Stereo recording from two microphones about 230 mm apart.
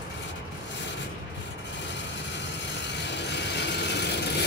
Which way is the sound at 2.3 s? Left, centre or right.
Left.